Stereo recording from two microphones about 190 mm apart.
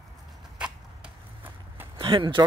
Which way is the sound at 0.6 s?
10° right (ahead or behind).